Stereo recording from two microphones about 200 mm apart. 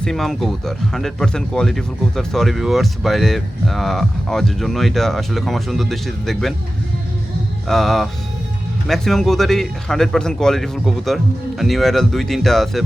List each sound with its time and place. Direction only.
0.0 s speech: centre (ahead or behind)
7.7 s speech: centre (ahead or behind)